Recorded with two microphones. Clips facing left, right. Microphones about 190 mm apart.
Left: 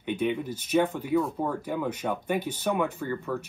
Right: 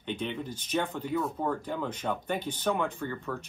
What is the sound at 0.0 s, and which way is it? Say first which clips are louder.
Speech: left 6 dB; 10° left (ahead or behind).